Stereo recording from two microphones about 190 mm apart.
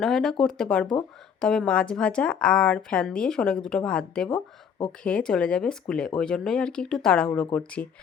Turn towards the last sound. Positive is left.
turn(degrees=5)  # may be behind; listen again after turning